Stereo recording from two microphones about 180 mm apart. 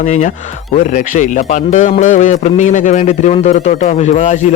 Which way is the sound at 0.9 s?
45° left (ahead or behind).